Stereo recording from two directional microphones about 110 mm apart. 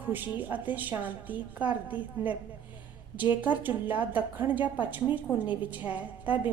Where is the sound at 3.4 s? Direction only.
15° right (ahead or behind).